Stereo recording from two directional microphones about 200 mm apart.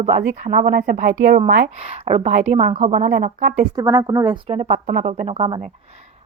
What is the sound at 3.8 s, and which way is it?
Speech, 15° right (ahead or behind).